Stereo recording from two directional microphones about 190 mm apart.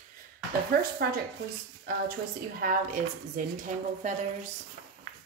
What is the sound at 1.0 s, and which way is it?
Speech, 55° right (ahead or behind).